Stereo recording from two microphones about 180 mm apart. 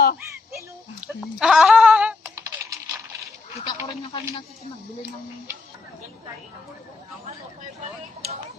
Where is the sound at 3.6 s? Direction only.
25° left (ahead or behind).